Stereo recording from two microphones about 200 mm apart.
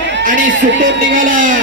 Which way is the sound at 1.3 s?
40° right (ahead or behind).